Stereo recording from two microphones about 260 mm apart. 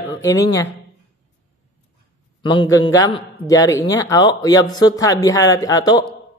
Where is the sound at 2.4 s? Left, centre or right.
Centre.